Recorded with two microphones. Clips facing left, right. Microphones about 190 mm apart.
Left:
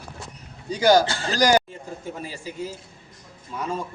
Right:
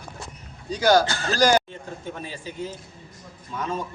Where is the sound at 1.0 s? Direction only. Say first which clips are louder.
Left 1 dB; 30° left (ahead or behind).